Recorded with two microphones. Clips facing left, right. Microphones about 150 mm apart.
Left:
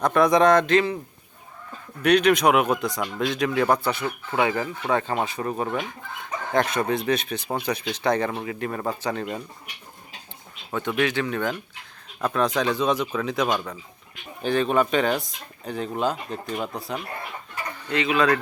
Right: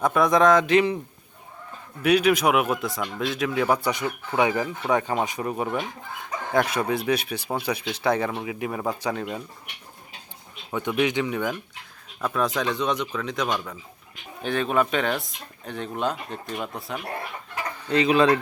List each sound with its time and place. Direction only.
0.0 s speech: centre (ahead or behind)
0.7 s speech: 15° right (ahead or behind)
2.0 s speech: 5° right (ahead or behind)
10.8 s speech: 15° right (ahead or behind)
12.2 s speech: 5° right (ahead or behind)
17.8 s speech: 35° right (ahead or behind)